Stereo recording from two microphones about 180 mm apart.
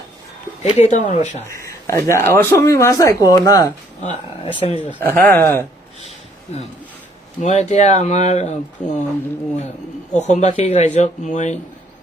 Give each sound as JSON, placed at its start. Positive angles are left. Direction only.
{"t": 0.6, "sound": "speech", "side_deg": 40}
{"t": 1.5, "sound": "speech", "side_deg": 15}
{"t": 4.8, "sound": "speech", "side_deg": 10}
{"t": 7.4, "sound": "speech", "side_deg": 40}
{"t": 10.2, "sound": "speech", "side_deg": 40}